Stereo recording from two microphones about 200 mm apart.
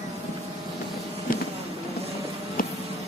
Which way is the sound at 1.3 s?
45° left (ahead or behind).